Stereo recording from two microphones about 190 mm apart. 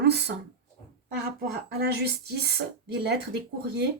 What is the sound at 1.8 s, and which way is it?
Speech, 55° right (ahead or behind).